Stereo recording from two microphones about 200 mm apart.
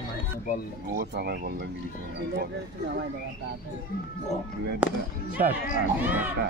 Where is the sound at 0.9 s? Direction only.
55° right (ahead or behind).